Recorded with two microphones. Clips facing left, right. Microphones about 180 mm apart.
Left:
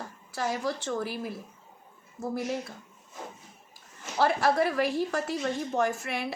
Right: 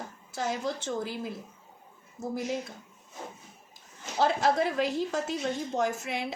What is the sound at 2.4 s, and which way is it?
Speech, 15° right (ahead or behind).